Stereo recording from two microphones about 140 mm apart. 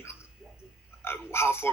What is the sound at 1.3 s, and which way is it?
Speech, 15° left (ahead or behind).